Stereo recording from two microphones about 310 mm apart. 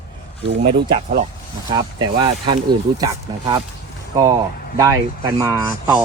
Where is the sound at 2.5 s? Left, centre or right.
Centre.